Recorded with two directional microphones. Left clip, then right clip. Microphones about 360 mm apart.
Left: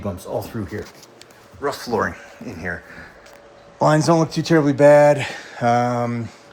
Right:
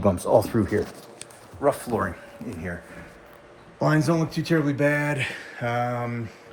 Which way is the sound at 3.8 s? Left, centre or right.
Centre.